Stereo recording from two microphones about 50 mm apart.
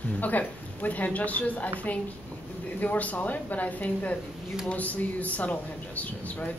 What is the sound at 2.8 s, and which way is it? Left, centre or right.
Speech, left.